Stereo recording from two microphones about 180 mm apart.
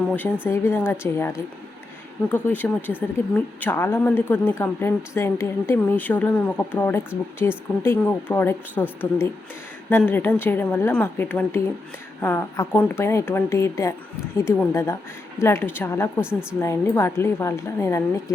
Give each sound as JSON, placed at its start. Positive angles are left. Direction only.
{"t": 0.4, "sound": "a woman's voice", "side_deg": 15}
{"t": 16.2, "sound": "speech", "side_deg": -5}
{"t": 16.6, "sound": "a woman's voice", "side_deg": 15}